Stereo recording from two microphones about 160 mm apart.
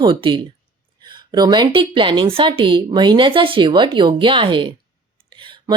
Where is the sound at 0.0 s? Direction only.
30° right (ahead or behind).